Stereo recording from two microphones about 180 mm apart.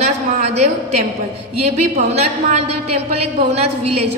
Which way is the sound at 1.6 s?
35° right (ahead or behind).